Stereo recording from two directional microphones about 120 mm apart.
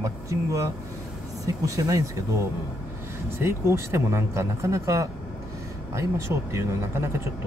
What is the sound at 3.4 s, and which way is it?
Speech, 20° right (ahead or behind).